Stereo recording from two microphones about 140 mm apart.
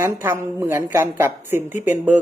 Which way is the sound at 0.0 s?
20° right (ahead or behind).